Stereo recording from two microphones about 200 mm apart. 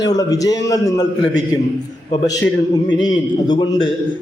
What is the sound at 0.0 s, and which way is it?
A man's voice, 20° left (ahead or behind).